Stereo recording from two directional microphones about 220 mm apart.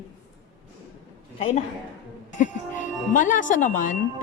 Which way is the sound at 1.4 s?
30° left (ahead or behind).